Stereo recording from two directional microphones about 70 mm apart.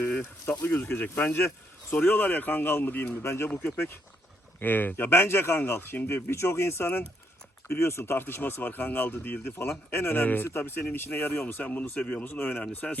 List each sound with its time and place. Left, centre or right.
0.0 s a sound: left
0.6 s speech: left
12.8 s speech: centre